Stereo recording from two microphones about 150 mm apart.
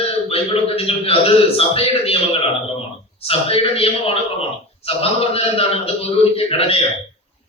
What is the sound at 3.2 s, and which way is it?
A man's voice, 40° left (ahead or behind).